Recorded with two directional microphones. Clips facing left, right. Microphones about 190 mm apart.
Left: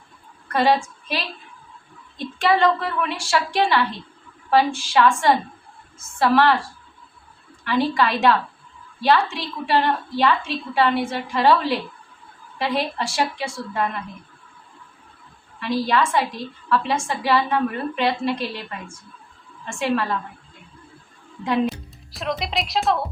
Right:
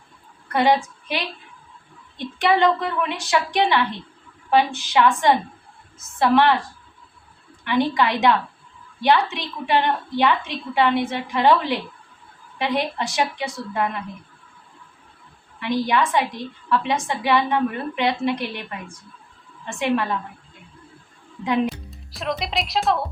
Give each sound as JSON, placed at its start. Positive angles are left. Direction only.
{"t": 0.4, "sound": "a woman's voice", "side_deg": -15}
{"t": 2.1, "sound": "a woman's voice", "side_deg": -15}
{"t": 7.6, "sound": "a woman's voice", "side_deg": -20}
{"t": 15.6, "sound": "a woman's voice", "side_deg": -15}
{"t": 21.4, "sound": "a woman's voice", "side_deg": -15}
{"t": 21.8, "sound": "speech", "side_deg": 0}